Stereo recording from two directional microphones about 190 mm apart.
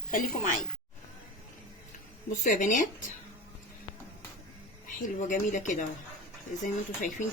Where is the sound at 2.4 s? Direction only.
40° left (ahead or behind).